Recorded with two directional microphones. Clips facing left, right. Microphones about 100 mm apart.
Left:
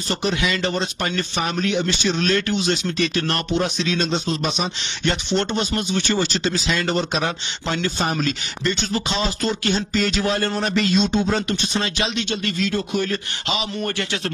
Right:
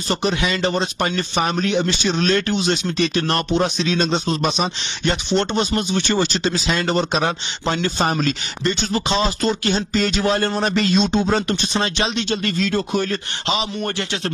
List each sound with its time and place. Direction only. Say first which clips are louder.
0.1 s speech: right 2 dB; 25° right (ahead or behind)
4.0 s speech: right 4 dB; 40° right (ahead or behind)
5.0 s speech: right 2 dB; 20° right (ahead or behind)
8.0 s speech: right 4 dB; 40° right (ahead or behind)
8.6 s speech: right 2 dB; 25° right (ahead or behind)